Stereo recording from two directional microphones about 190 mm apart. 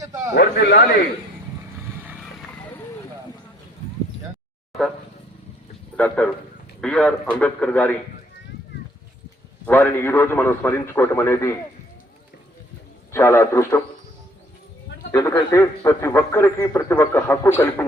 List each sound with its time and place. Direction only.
0.3 s a man's voice: 60° left (ahead or behind)
6.0 s a man's voice: 10° left (ahead or behind)
9.6 s a man's voice: 10° left (ahead or behind)
13.1 s a man's voice: 15° left (ahead or behind)
15.1 s a man's voice: 10° left (ahead or behind)